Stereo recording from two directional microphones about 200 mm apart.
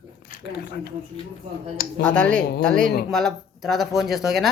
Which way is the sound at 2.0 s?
5° left (ahead or behind).